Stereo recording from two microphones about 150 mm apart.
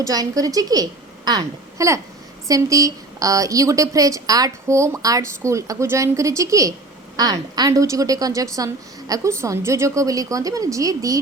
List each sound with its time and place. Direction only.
0.0 s a woman's voice: 25° right (ahead or behind)